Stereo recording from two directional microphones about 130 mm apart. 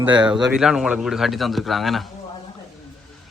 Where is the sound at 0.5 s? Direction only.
5° right (ahead or behind).